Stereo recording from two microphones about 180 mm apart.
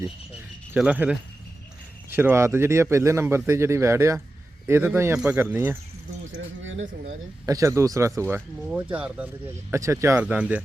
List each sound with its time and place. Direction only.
0.7 s speech: 10° right (ahead or behind)
6.3 s speech: 90° right
7.4 s speech: 20° right (ahead or behind)